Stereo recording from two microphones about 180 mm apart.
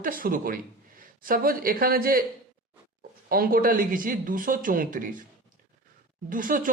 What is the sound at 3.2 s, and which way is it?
Speech, 55° right (ahead or behind).